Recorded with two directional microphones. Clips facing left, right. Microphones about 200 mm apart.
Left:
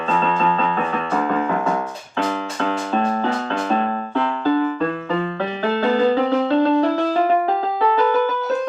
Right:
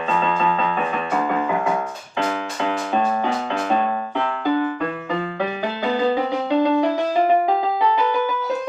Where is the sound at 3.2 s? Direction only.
10° right (ahead or behind).